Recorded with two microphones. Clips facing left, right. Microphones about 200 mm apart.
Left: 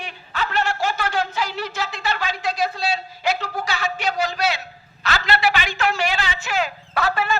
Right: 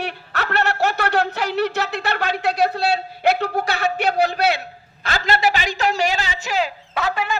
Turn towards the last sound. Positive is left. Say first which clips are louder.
# left 1 dB
turn(degrees=-15)  # may be behind; listen again after turning